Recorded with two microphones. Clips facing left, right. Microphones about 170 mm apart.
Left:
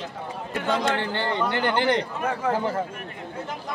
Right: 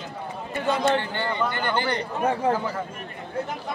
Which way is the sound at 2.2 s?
30° right (ahead or behind).